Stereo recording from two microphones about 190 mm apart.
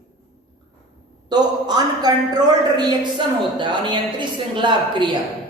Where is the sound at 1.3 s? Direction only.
20° right (ahead or behind).